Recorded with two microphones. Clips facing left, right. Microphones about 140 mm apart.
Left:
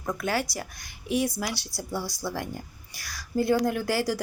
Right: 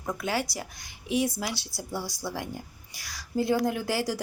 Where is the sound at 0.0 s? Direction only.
20° right (ahead or behind).